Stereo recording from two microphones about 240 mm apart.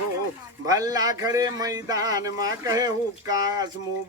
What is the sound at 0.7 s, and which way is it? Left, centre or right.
Speech, centre.